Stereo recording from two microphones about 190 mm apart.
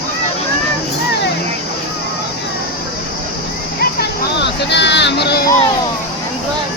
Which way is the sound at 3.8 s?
60° left (ahead or behind).